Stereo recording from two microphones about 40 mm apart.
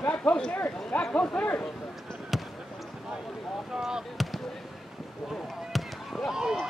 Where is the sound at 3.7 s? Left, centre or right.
Centre.